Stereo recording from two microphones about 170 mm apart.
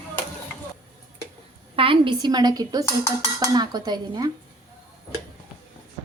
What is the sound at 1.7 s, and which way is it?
A woman's voice, 30° right (ahead or behind).